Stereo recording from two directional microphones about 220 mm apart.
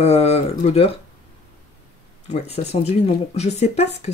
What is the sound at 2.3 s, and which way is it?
Speech, 30° left (ahead or behind).